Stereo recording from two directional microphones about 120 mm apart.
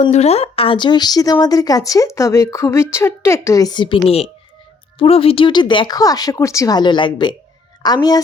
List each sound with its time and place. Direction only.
0.1 s a woman's voice: 60° left (ahead or behind); by 8.2 s 35° left (ahead or behind)